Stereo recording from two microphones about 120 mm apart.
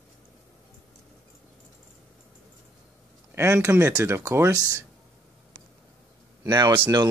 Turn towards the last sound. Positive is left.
turn(degrees=-40)  # may be behind; listen again after turning